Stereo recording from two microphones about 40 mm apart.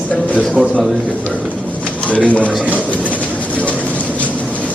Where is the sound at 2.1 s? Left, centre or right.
Left.